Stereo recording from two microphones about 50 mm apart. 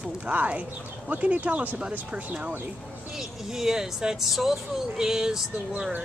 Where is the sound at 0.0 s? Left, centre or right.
Right.